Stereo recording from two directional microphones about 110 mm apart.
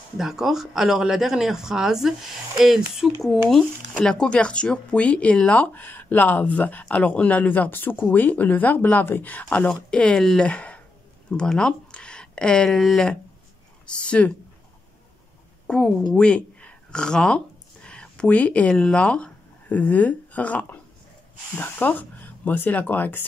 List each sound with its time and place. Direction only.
0.2 s speech: 5° right (ahead or behind)
15.6 s a sound: 5° left (ahead or behind)
16.2 s speech: 10° left (ahead or behind)